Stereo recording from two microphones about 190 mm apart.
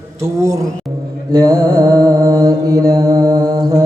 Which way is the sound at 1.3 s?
20° right (ahead or behind).